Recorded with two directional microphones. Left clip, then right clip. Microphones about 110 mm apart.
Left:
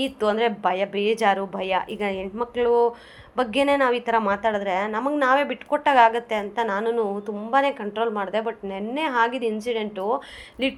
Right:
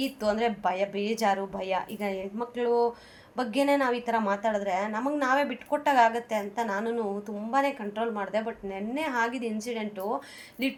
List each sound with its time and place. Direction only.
0.0 s a woman's voice: 30° left (ahead or behind)